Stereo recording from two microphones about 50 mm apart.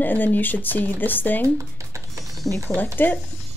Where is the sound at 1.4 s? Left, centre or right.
Right.